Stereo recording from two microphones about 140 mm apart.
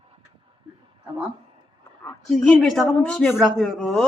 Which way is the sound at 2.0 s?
5° left (ahead or behind).